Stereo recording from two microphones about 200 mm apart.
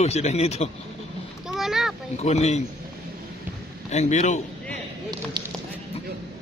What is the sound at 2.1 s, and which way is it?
Speech, 35° left (ahead or behind).